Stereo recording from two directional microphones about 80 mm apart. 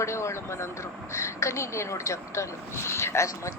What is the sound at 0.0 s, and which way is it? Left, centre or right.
Speech, left.